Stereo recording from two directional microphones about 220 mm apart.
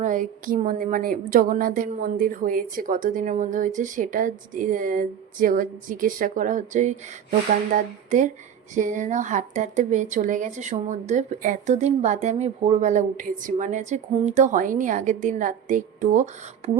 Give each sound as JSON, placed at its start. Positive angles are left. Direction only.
{"t": 0.0, "sound": "speech", "side_deg": -35}